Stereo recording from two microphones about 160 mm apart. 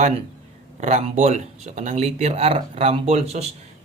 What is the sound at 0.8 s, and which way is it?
Speech, 45° right (ahead or behind).